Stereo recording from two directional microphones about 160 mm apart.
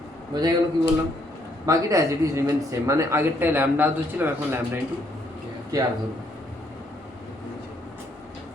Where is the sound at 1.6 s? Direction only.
20° right (ahead or behind).